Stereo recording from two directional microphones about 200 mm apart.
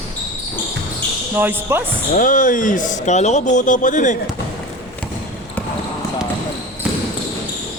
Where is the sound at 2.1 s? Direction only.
40° left (ahead or behind).